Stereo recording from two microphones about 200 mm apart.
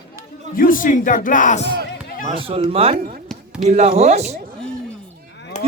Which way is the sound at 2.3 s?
25° right (ahead or behind).